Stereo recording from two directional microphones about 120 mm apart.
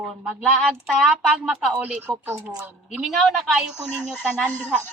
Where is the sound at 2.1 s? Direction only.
35° right (ahead or behind).